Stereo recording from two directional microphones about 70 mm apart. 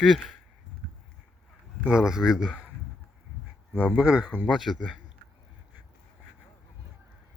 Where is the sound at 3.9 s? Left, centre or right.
Centre.